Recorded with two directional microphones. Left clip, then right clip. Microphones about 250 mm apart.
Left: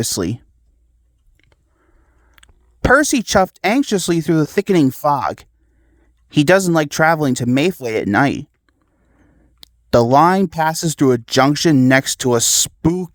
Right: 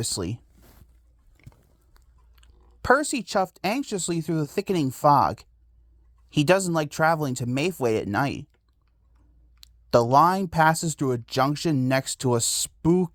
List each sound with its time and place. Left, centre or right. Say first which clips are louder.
0.0 s speech: left 9 dB; left
1.4 s biting: even; left
2.3 s speech: left 10 dB; left
9.6 s speech: left 7 dB; left